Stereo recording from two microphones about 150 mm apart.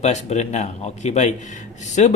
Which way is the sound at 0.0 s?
50° left (ahead or behind).